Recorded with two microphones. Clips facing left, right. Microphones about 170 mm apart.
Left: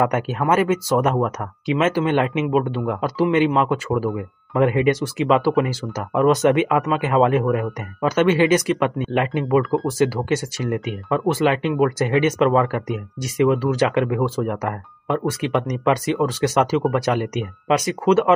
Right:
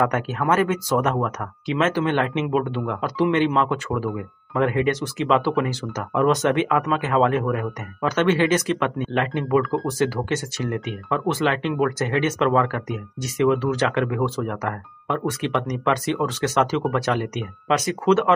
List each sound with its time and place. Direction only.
0.0 s speech: 15° left (ahead or behind)